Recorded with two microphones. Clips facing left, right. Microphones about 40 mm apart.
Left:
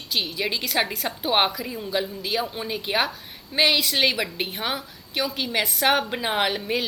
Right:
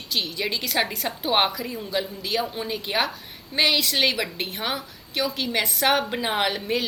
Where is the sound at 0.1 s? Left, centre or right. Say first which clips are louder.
Left 1 dB; centre.